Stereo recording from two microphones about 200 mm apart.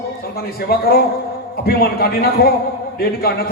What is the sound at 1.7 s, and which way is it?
Speech, 50° left (ahead or behind).